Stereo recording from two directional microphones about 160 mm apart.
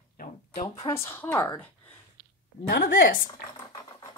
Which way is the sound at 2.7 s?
70° left (ahead or behind).